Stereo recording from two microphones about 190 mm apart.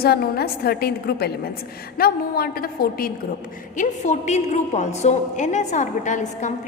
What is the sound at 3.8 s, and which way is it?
A woman's voice, 40° left (ahead or behind).